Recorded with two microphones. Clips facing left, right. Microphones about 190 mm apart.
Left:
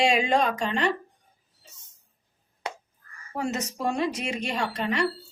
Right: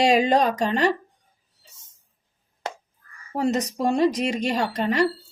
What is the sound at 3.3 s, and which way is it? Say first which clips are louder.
Speech: right 6 dB; 35° right (ahead or behind).